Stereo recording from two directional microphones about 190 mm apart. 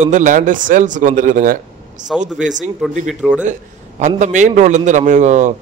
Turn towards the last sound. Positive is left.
turn(degrees=-40)  # may be behind; listen again after turning